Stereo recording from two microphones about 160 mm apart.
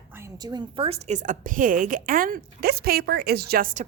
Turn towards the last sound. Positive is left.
turn(degrees=-60)  # may be behind; listen again after turning